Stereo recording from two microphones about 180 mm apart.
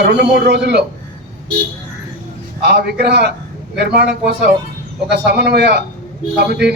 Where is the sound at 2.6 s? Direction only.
65° right (ahead or behind).